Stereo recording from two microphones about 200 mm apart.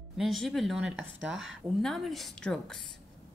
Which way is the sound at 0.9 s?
75° right (ahead or behind).